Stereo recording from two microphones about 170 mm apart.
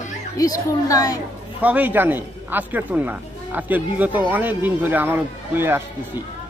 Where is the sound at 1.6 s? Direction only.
10° right (ahead or behind).